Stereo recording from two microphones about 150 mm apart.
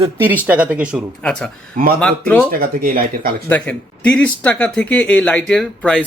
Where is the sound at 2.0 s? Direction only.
5° left (ahead or behind).